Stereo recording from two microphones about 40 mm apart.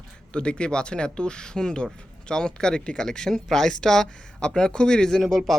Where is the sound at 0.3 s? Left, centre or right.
Left.